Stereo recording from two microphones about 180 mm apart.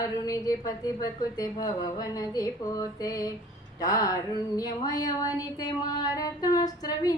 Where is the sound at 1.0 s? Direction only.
20° left (ahead or behind).